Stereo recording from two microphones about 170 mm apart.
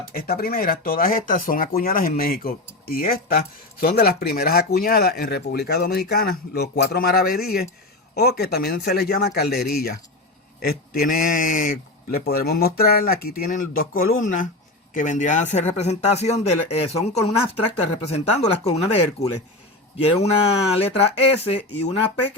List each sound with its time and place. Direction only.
0.1 s speech: 60° left (ahead or behind)
10.6 s speech: 55° left (ahead or behind); by 21.6 s 35° left (ahead or behind)